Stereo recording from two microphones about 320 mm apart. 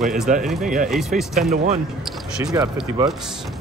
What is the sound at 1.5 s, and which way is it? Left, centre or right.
Speech, right.